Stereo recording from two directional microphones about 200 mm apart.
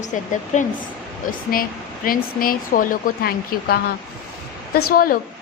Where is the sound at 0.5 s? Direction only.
40° left (ahead or behind).